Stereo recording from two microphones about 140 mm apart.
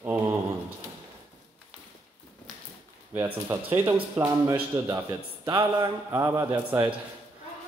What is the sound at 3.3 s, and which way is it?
A man's voice, 15° right (ahead or behind).